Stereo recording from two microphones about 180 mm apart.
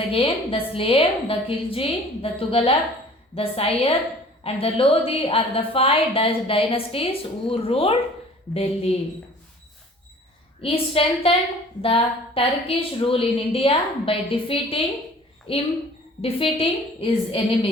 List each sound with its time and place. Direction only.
0.1 s speech: 30° left (ahead or behind)
10.6 s a woman's voice: 30° left (ahead or behind)